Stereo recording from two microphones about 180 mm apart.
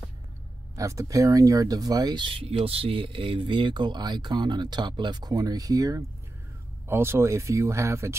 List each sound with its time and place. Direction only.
0.7 s speech: 20° right (ahead or behind)